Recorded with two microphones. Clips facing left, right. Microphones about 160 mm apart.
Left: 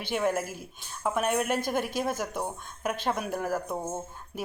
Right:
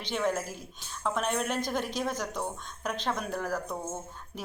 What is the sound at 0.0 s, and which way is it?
A woman's voice, 10° left (ahead or behind).